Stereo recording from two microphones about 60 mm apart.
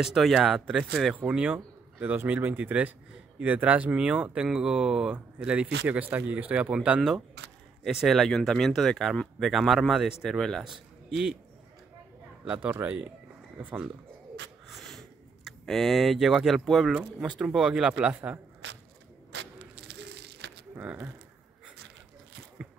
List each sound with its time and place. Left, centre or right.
0.0 s speech: centre
1.1 s speech: right
7.9 s speech: centre
8.2 s a man's voice: centre
12.8 s speech: right
14.7 s a sound: centre
17.2 s speech: centre
20.8 s speech: right